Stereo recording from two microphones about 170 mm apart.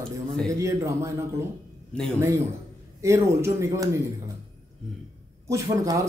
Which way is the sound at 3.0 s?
15° right (ahead or behind).